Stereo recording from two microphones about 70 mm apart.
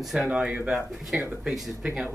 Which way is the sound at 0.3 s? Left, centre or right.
Centre.